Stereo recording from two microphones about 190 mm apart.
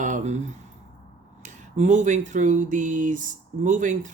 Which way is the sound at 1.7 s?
40° right (ahead or behind).